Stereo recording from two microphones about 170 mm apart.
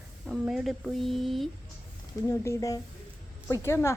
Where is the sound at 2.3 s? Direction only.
15° left (ahead or behind).